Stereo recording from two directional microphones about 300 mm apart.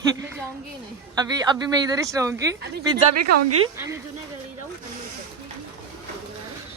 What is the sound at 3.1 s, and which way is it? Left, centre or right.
Speech, right.